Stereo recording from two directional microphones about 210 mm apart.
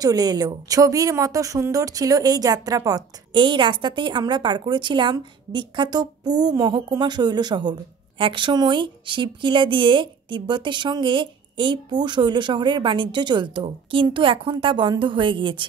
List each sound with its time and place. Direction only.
0.0 s a woman's voice: 20° right (ahead or behind)